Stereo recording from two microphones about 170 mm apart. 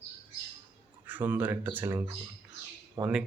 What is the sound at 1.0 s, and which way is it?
Speech, 10° right (ahead or behind).